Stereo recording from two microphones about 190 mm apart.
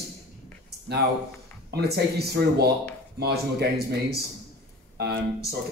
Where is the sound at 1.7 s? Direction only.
55° right (ahead or behind).